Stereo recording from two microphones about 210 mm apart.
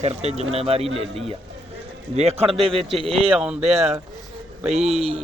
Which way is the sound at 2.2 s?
30° right (ahead or behind).